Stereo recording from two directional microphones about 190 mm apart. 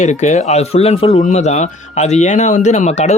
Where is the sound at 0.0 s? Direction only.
40° left (ahead or behind).